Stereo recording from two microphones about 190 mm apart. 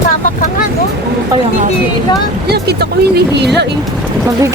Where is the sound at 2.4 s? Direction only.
55° right (ahead or behind).